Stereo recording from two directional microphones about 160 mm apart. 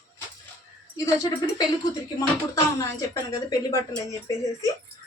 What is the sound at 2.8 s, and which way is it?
A woman's voice, 20° left (ahead or behind).